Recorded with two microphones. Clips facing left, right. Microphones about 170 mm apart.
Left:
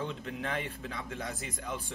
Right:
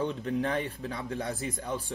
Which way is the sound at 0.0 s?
40° right (ahead or behind).